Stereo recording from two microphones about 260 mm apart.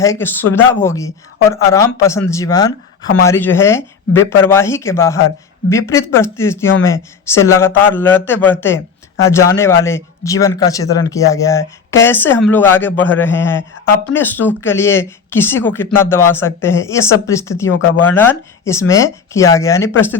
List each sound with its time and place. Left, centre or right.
0.0 s speech: centre
17.7 s speech: left
18.0 s speech: centre